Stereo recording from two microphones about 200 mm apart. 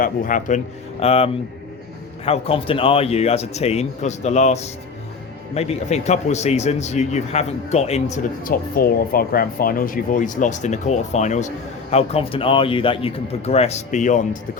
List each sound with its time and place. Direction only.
0.0 s a man's voice: 40° left (ahead or behind)